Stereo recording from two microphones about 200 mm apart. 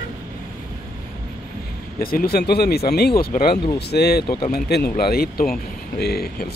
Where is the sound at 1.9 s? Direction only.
45° left (ahead or behind).